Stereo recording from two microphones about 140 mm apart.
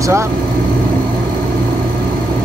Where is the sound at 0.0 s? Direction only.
20° right (ahead or behind).